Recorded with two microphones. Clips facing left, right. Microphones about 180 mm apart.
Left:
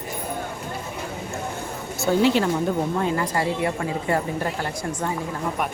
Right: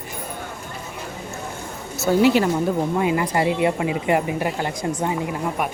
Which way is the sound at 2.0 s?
5° right (ahead or behind).